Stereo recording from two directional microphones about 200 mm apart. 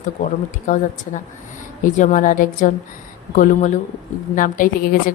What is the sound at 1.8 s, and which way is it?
A woman's voice, 40° left (ahead or behind).